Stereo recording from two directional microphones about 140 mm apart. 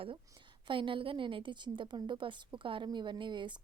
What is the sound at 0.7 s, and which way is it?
A woman's voice, 35° right (ahead or behind).